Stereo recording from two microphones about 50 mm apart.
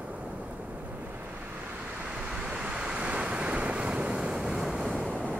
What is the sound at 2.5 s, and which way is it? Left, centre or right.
Waves, right.